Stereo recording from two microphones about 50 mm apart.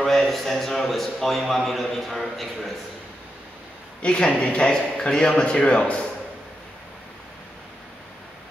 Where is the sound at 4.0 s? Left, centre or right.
Left.